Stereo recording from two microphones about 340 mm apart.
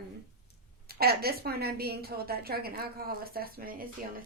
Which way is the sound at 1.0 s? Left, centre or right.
Right.